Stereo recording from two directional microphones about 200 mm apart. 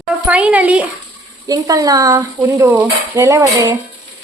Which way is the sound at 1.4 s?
20° right (ahead or behind).